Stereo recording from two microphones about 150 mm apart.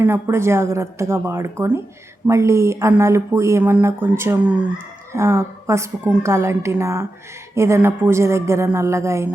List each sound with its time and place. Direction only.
0.0 s speech: 15° right (ahead or behind)